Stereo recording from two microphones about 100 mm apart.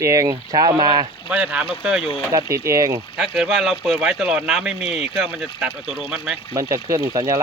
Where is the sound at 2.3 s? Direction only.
30° right (ahead or behind).